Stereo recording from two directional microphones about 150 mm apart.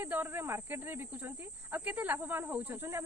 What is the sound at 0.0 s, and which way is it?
Speech, 15° right (ahead or behind).